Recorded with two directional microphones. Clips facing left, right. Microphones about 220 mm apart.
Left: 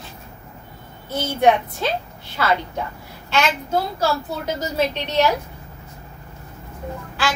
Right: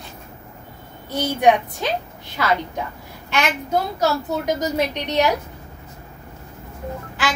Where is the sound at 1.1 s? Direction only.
15° right (ahead or behind).